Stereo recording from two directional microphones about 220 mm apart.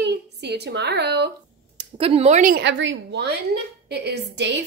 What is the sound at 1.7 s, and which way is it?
A woman's voice, 25° right (ahead or behind).